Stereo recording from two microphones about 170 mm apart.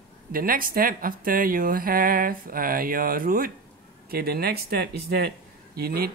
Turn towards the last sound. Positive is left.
turn(degrees=-65)  # may be behind; listen again after turning